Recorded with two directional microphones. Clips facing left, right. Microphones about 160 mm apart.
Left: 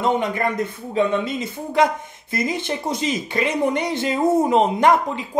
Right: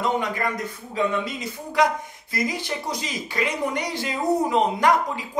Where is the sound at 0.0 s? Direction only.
25° left (ahead or behind).